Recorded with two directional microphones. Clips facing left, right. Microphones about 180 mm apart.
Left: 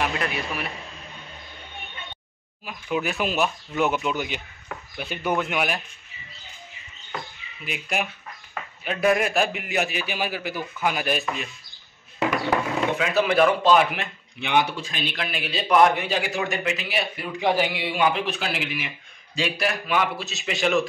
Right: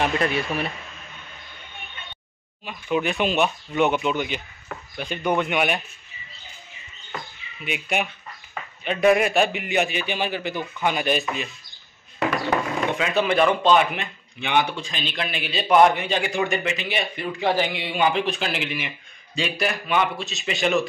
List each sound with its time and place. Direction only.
0.0 s speech: 30° right (ahead or behind)
2.6 s a man's voice: 5° left (ahead or behind)
7.6 s a man's voice: centre (ahead or behind)